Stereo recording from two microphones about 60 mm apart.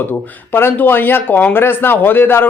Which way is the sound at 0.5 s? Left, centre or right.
Left.